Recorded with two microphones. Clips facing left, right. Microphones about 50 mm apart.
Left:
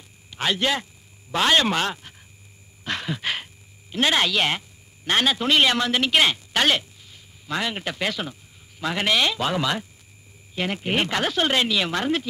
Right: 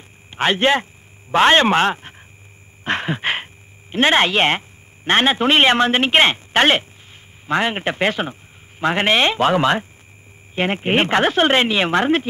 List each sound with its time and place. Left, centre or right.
0.3 s a man's voice: right
2.8 s a sound: right
3.9 s a man's voice: right